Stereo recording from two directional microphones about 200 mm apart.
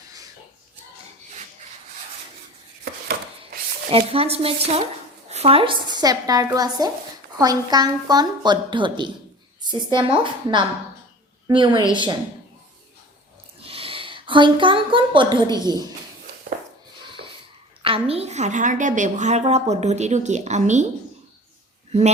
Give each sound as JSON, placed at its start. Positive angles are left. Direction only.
{"t": 3.9, "sound": "a woman's voice", "side_deg": -30}
{"t": 13.6, "sound": "a woman's voice", "side_deg": -30}
{"t": 17.2, "sound": "a sound", "side_deg": -55}
{"t": 17.8, "sound": "a woman's voice", "side_deg": -30}